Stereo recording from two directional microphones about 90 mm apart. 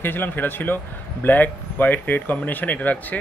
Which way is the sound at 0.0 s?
20° left (ahead or behind).